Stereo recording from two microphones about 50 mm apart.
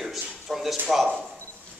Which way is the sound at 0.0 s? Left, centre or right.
Centre.